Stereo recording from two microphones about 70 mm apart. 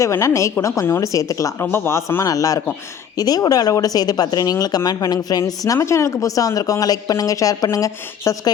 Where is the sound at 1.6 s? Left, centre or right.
Left.